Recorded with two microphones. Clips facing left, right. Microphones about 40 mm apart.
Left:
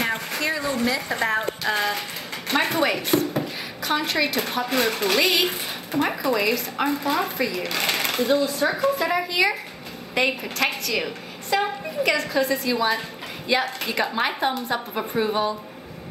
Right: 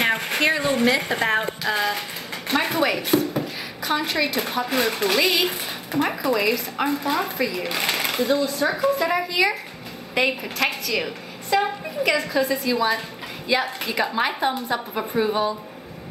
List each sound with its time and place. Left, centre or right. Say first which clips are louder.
0.0 s speech: right 4 dB; right
1.1 s speech: right 2 dB; right
1.6 s a woman's voice: right 1 dB; centre